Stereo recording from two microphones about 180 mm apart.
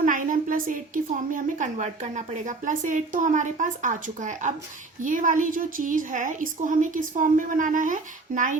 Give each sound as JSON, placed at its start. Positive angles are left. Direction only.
{"t": 0.0, "sound": "a woman's voice", "side_deg": -45}